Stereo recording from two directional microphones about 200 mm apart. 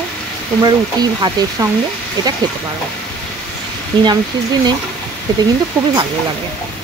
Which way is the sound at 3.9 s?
25° right (ahead or behind).